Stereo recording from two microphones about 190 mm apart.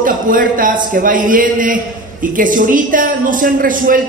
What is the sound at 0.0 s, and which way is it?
A man's voice, 45° right (ahead or behind).